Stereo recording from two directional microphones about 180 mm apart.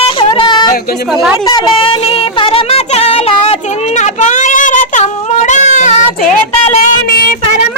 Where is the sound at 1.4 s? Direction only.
25° left (ahead or behind); by 6.8 s 40° left (ahead or behind).